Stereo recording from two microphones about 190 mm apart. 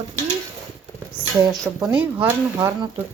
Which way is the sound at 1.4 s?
15° right (ahead or behind).